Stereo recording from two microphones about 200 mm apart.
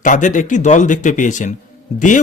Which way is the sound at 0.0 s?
40° left (ahead or behind).